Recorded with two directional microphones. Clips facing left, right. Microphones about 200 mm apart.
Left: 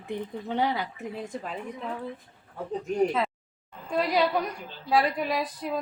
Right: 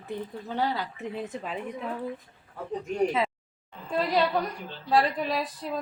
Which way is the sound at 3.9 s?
Centre (ahead or behind).